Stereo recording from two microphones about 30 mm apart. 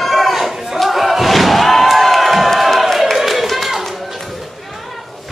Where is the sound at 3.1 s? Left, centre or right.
Centre.